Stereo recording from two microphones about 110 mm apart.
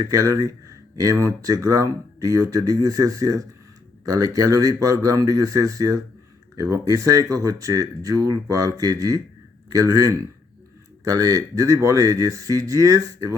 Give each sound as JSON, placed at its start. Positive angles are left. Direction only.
{"t": 0.1, "sound": "speech", "side_deg": -30}